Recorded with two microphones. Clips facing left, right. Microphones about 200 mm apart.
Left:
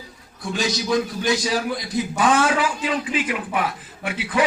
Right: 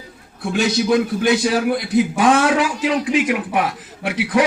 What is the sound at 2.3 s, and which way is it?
A man's voice, 75° right (ahead or behind).